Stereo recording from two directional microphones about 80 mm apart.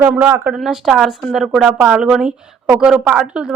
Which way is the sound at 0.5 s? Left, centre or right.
Centre.